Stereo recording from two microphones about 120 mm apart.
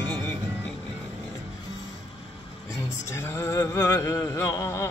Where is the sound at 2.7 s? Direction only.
25° left (ahead or behind).